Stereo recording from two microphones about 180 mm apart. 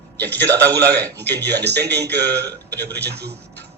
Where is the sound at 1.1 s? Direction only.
65° right (ahead or behind).